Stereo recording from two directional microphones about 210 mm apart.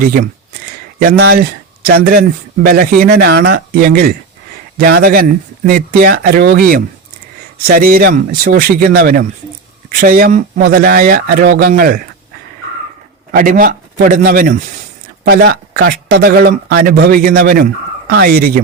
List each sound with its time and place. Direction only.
0.0 s a sound: 40° right (ahead or behind)
1.3 s speech: 45° right (ahead or behind)
13.3 s a man's voice: 40° right (ahead or behind)